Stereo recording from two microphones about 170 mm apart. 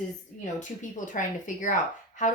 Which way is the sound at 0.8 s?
50° left (ahead or behind).